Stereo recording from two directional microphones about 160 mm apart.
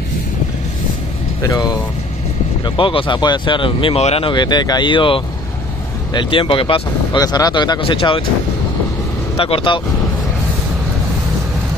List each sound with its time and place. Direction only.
1.5 s speech: 25° left (ahead or behind)
7.2 s speech: 25° left (ahead or behind)
9.4 s speech: 35° left (ahead or behind)